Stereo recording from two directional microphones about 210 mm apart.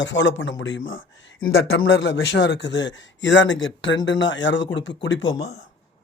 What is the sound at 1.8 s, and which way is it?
Speech, 55° left (ahead or behind).